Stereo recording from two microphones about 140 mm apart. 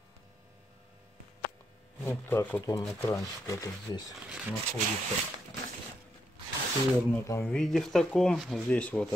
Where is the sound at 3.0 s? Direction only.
20° left (ahead or behind).